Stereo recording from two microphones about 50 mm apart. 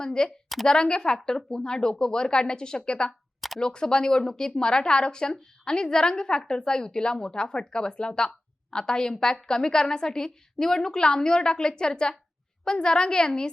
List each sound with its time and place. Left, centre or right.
0.0 s speech: centre
0.4 s a woman's voice: centre
0.7 s speech: centre